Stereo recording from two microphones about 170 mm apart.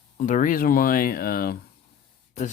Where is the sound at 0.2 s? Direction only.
50° left (ahead or behind).